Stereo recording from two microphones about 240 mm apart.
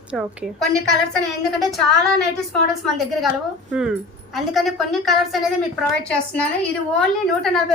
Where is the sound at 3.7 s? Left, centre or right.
Centre.